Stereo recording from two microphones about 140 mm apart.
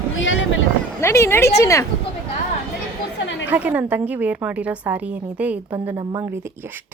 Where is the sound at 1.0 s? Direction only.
20° left (ahead or behind).